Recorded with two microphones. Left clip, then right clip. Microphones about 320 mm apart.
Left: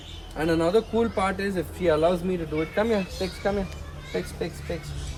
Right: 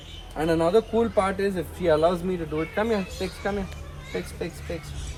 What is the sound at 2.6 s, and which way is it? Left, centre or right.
Speech, centre.